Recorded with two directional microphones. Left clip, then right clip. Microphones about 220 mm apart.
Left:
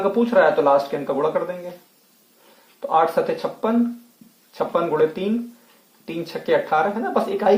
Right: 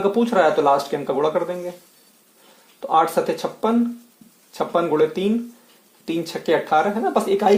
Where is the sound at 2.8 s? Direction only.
40° right (ahead or behind).